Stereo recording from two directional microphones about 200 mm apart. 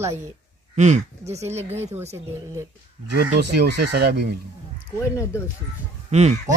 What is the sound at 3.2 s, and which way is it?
Speech, 55° right (ahead or behind).